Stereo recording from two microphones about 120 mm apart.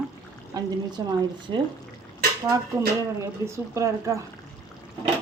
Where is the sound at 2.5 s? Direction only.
25° right (ahead or behind).